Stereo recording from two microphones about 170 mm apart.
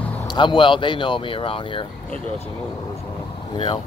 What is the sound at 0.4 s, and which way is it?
Speech, 30° left (ahead or behind).